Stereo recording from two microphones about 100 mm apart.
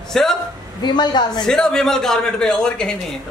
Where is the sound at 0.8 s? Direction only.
45° left (ahead or behind).